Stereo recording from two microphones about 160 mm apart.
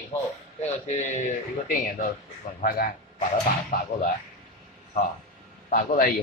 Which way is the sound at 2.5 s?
60° left (ahead or behind).